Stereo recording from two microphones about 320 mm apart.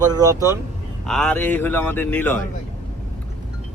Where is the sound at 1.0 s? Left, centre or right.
Centre.